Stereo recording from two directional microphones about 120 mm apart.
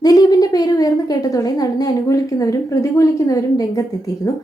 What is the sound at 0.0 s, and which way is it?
A woman's voice, 30° left (ahead or behind).